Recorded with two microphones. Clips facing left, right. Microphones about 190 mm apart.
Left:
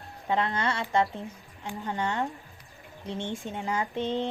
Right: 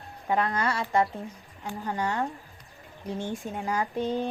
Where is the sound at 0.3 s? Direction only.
25° left (ahead or behind).